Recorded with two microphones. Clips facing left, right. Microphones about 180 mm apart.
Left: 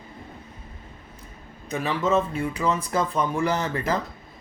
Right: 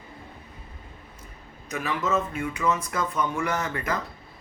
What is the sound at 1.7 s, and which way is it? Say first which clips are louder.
Speech: left 4 dB; 30° left (ahead or behind).